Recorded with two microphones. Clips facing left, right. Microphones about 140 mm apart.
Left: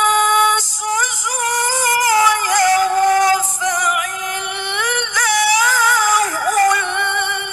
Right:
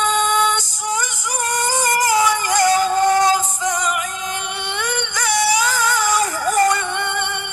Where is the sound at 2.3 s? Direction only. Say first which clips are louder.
Left 1 dB; 25° right (ahead or behind).